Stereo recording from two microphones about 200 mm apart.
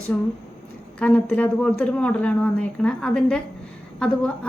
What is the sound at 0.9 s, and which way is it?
A woman's voice, 5° left (ahead or behind).